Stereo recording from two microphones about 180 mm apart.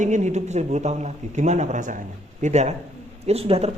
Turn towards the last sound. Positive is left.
turn(degrees=-35)  # may be behind; listen again after turning